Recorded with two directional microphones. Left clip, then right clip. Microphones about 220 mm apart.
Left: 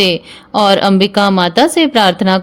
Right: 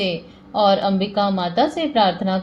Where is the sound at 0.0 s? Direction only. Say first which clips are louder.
Left 11 dB; 45° left (ahead or behind).